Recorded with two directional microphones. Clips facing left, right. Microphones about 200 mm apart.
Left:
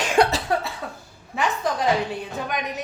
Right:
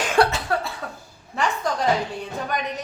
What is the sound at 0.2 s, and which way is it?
Cough, 15° left (ahead or behind).